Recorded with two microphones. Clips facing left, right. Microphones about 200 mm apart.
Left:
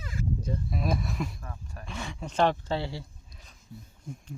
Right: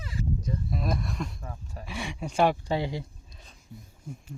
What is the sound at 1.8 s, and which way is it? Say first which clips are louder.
Speech: right 3 dB; 10° right (ahead or behind).